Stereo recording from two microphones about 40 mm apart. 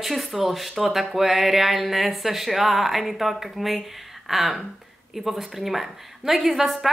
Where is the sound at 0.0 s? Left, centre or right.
Centre.